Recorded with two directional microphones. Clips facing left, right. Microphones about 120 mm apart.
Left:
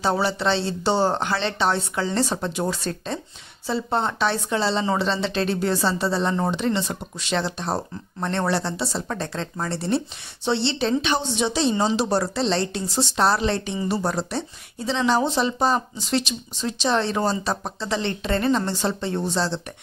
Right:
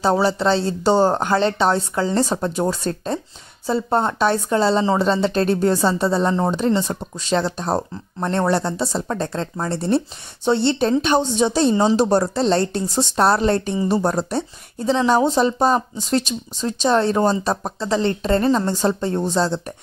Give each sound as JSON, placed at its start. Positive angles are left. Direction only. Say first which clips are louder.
{"t": 0.0, "sound": "speech", "louder": "right 5 dB", "side_deg": -40}